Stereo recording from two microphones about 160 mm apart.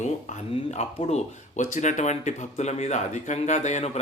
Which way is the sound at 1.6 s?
50° left (ahead or behind).